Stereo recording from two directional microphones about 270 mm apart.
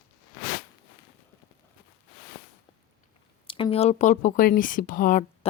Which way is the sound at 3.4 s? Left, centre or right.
Centre.